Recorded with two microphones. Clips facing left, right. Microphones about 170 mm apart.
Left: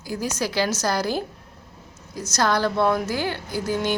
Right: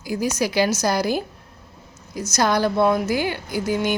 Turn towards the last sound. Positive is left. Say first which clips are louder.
# right 2 dB
turn(degrees=-15)  # may be behind; listen again after turning